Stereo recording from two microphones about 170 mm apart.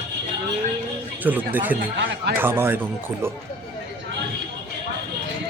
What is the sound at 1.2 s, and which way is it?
A man's voice, 10° right (ahead or behind).